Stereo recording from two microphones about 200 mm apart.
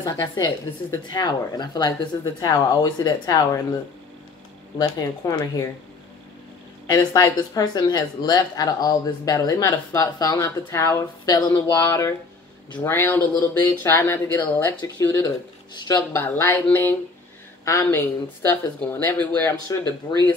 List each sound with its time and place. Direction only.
0.0 s speech: 20° left (ahead or behind)
4.7 s speech: 20° left (ahead or behind)
6.9 s speech: 15° left (ahead or behind)
15.7 s speech: 20° left (ahead or behind)
16.2 s speech: 10° left (ahead or behind)